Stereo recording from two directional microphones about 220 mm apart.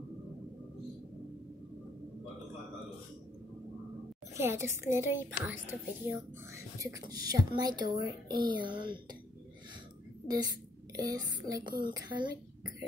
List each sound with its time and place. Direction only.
4.4 s a woman's voice: 10° right (ahead or behind)
10.2 s a woman's voice: 15° right (ahead or behind)